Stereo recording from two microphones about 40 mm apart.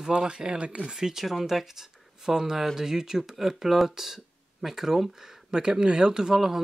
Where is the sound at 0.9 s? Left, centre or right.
Centre.